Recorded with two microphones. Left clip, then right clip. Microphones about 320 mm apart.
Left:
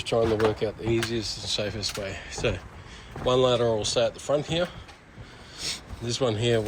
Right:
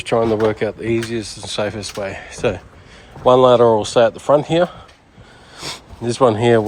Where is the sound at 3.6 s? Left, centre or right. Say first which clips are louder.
Right 11 dB; right.